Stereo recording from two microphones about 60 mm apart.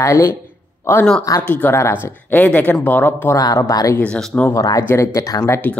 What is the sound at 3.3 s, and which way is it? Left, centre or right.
Speech, left.